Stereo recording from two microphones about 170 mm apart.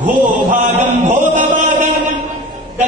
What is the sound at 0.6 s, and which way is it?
Chant, 40° right (ahead or behind).